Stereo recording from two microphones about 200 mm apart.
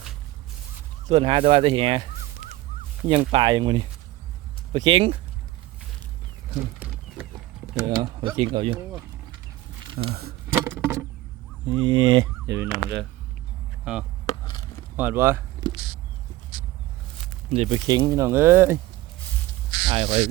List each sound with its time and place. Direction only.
1.0 s fowl: 25° right (ahead or behind)
3.1 s fowl: 25° right (ahead or behind)
6.7 s a sound: 5° right (ahead or behind)
7.8 s fowl: 25° right (ahead or behind)
8.8 s speech: 10° right (ahead or behind)
10.0 s speech: 35° right (ahead or behind)
10.5 s rodents: 10° right (ahead or behind)
11.7 s fowl: 20° right (ahead or behind)
13.9 s speech: centre (ahead or behind)
17.5 s speech: 30° right (ahead or behind); by 18.8 s 10° right (ahead or behind)
19.9 s speech: 30° right (ahead or behind)